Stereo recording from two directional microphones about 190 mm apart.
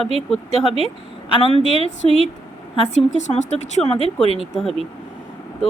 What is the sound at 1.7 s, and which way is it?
A woman's voice, 35° left (ahead or behind).